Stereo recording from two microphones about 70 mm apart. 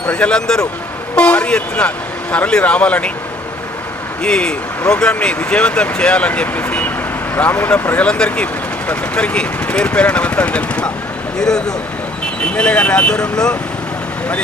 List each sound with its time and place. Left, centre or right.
0.1 s speech: centre
4.2 s speech: centre; by 7.7 s left
7.9 s speech: centre